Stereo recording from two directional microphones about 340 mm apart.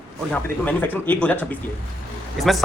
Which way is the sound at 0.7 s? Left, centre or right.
Centre.